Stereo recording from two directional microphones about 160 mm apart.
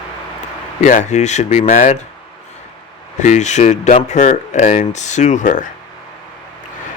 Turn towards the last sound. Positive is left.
turn(degrees=55)  # may be behind; listen again after turning